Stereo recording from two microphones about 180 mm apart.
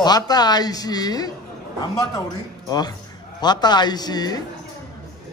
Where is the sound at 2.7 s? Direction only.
20° left (ahead or behind).